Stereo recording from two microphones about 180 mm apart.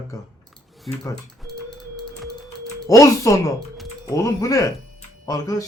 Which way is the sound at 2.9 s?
20° left (ahead or behind).